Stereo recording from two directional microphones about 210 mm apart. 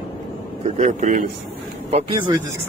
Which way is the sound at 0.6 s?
35° right (ahead or behind).